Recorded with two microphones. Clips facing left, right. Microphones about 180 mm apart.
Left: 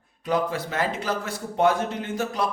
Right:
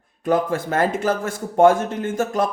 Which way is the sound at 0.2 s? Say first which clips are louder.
Right 5 dB; 50° right (ahead or behind).